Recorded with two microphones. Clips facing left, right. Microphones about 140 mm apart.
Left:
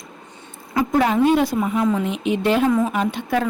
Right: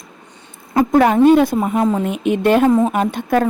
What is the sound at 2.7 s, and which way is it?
Speech, 40° right (ahead or behind).